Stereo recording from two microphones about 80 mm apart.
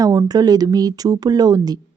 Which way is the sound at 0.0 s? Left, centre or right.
Right.